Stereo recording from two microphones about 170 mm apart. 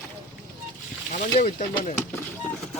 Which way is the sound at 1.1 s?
50° left (ahead or behind).